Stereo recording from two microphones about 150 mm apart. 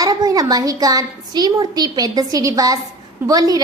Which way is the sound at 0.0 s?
25° right (ahead or behind).